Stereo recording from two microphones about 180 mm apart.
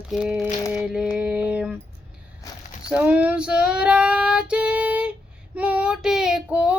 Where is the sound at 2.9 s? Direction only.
5° right (ahead or behind).